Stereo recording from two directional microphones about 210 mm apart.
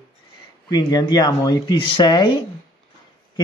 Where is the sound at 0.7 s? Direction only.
20° left (ahead or behind).